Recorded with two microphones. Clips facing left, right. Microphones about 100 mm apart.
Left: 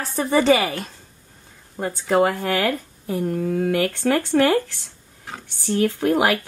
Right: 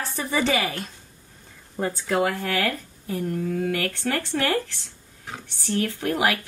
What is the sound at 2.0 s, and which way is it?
A woman's voice, 35° left (ahead or behind).